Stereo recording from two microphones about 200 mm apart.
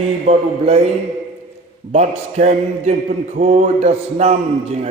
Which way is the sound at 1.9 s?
35° right (ahead or behind).